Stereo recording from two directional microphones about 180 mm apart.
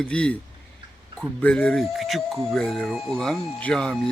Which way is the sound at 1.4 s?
5° left (ahead or behind).